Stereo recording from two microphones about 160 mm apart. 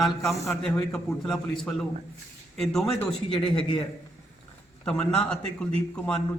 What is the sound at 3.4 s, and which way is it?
Speech, 35° left (ahead or behind).